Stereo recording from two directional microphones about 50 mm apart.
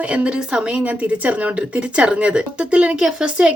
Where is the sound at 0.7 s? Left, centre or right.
Right.